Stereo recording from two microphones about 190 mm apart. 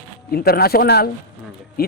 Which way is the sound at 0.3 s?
55° left (ahead or behind).